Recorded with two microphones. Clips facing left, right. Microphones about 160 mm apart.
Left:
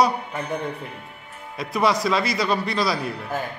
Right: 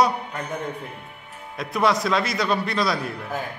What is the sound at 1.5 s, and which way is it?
A man's voice, centre (ahead or behind).